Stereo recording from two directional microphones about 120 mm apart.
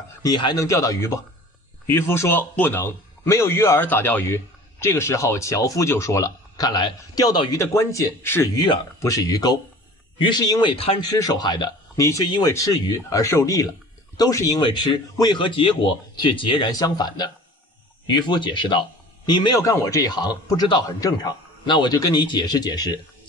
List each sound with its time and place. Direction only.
0.2 s a man's voice: 35° left (ahead or behind)
10.7 s speech: 50° left (ahead or behind)
11.0 s a man's voice: 30° left (ahead or behind)
12.0 s a man's voice: 25° left (ahead or behind)
14.6 s speech: 40° left (ahead or behind)
16.7 s a man's voice: 35° left (ahead or behind)
19.6 s a man's voice: 25° left (ahead or behind)